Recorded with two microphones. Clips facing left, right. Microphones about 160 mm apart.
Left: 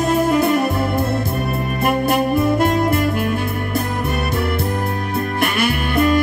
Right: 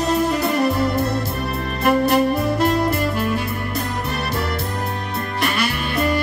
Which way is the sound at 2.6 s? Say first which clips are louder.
Left 2 dB; 50° left (ahead or behind).